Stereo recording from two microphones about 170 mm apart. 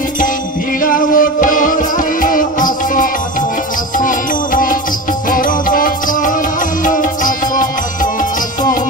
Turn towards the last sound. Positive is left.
turn(degrees=50)  # may be behind; listen again after turning